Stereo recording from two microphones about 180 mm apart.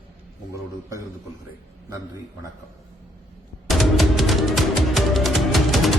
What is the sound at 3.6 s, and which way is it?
Music, centre (ahead or behind).